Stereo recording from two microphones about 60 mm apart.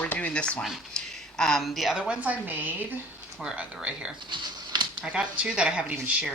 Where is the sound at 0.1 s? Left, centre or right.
Left.